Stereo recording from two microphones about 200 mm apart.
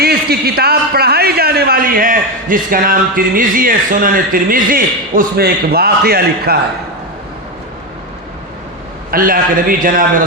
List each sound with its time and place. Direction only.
0.0 s a man's voice: 50° right (ahead or behind)
9.0 s a man's voice: 45° right (ahead or behind)